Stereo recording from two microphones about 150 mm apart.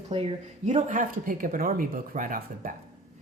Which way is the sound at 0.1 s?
40° right (ahead or behind).